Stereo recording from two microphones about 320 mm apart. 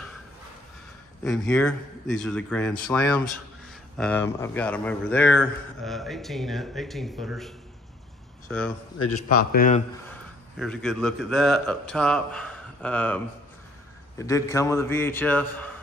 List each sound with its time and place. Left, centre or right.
1.2 s a man's voice: centre
9.5 s speech: left
10.6 s a man's voice: centre